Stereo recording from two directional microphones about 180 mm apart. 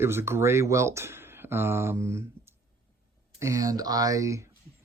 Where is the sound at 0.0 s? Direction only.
15° right (ahead or behind).